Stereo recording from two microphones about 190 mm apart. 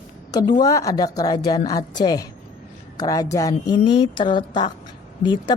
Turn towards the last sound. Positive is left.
turn(degrees=25)  # may be behind; listen again after turning